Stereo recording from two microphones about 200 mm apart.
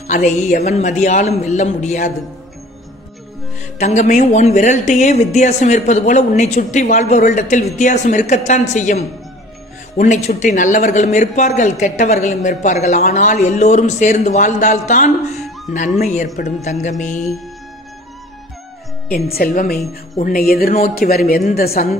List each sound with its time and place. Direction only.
0.0 s speech: 35° left (ahead or behind)
3.7 s speech: 35° left (ahead or behind)
19.1 s speech: 50° left (ahead or behind)